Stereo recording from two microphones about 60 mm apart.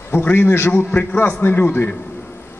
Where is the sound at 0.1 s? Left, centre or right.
Left.